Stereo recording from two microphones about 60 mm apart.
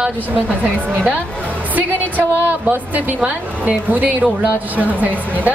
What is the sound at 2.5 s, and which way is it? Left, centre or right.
A woman's voice, right.